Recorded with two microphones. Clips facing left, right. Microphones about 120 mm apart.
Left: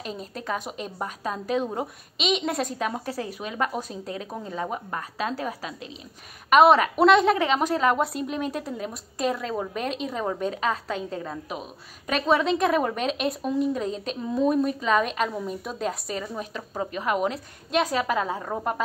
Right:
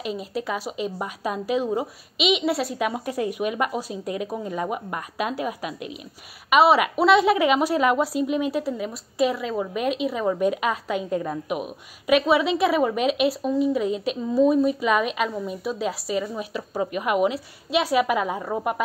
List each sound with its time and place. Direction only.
0.0 s a woman's voice: 5° right (ahead or behind)